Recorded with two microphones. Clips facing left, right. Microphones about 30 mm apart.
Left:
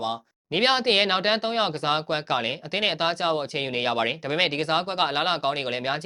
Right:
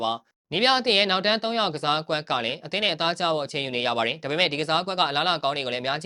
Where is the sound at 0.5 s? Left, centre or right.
Centre.